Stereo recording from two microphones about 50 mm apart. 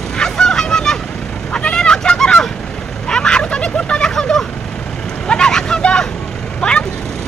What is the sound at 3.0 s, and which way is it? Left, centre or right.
Vehicle, centre.